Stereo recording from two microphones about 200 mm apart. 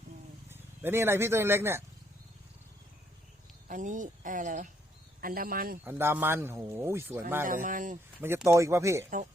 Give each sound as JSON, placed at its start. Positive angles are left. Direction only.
{"t": 0.5, "sound": "speech", "side_deg": -10}
{"t": 3.7, "sound": "speech", "side_deg": -40}
{"t": 5.8, "sound": "speech", "side_deg": -10}
{"t": 7.4, "sound": "speech", "side_deg": -40}
{"t": 8.2, "sound": "speech", "side_deg": -10}